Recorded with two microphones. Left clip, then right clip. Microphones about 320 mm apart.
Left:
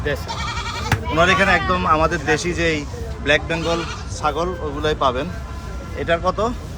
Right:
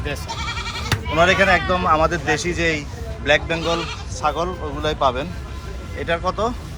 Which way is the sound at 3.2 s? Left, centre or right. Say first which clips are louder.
Even; centre.